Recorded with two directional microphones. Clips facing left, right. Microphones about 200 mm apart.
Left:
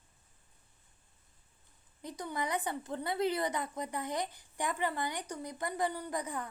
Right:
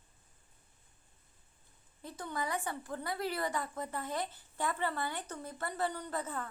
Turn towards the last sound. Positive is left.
turn(degrees=15)  # may be behind; listen again after turning